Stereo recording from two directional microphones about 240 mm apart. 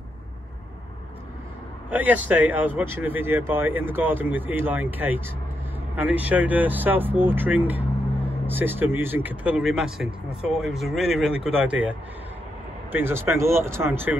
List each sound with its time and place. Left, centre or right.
1.9 s speech: centre
12.9 s speech: centre